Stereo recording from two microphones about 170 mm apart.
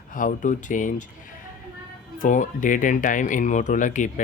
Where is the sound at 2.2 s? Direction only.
50° left (ahead or behind).